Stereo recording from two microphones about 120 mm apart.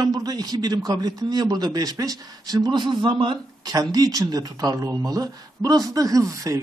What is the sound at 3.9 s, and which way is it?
Speech, 30° right (ahead or behind).